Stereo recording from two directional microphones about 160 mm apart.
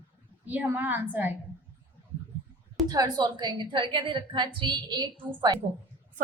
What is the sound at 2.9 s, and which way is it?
A woman's voice, 25° right (ahead or behind).